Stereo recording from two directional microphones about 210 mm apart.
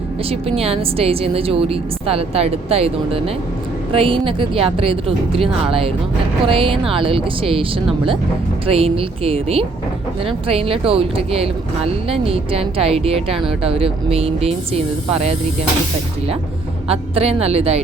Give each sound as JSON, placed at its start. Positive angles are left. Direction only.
{"t": 0.3, "sound": "speech", "side_deg": -25}
{"t": 8.6, "sound": "speech", "side_deg": -25}
{"t": 16.9, "sound": "speech", "side_deg": -30}